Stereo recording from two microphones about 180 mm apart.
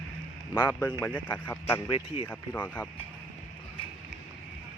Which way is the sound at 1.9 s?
30° left (ahead or behind).